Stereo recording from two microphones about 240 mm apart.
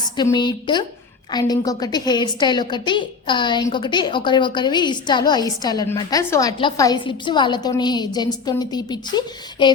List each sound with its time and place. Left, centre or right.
0.2 s a woman's voice: centre